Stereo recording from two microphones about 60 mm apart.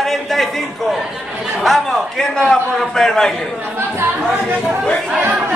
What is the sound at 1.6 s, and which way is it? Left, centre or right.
A man's voice, centre.